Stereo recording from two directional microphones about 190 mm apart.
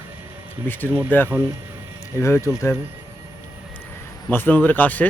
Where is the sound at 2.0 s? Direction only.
15° left (ahead or behind).